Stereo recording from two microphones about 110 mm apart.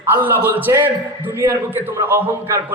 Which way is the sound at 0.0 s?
20° right (ahead or behind).